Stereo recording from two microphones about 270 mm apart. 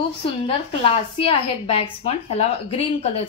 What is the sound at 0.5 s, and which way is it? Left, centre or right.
Speech, left.